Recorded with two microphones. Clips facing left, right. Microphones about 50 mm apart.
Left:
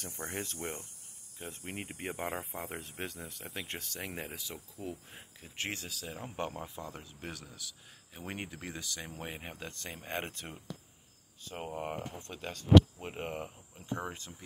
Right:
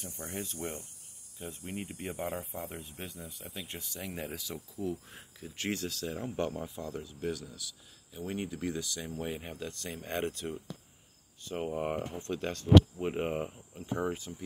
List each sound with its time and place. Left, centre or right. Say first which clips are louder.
0.0 s speech: left 1 dB; left
2.2 s speech: right 2 dB; left
2.8 s speech: left 2 dB; left
3.4 s speech: left 3 dB; left
4.4 s speech: right 5 dB; left
5.9 s speech: right 6 dB; centre
6.2 s speech: right 3 dB; left
9.2 s speech: right 5 dB; left
9.6 s speech: right 4 dB; left
11.4 s speech: right 5 dB; centre